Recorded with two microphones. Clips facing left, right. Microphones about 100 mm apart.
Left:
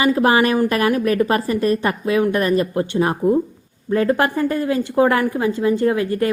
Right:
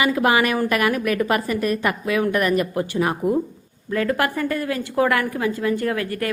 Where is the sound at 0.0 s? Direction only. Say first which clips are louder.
Left 3 dB; 30° left (ahead or behind).